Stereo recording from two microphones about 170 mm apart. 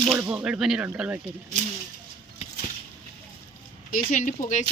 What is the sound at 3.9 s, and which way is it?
Speech, 50° left (ahead or behind).